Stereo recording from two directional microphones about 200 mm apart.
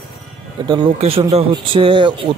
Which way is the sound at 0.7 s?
25° right (ahead or behind).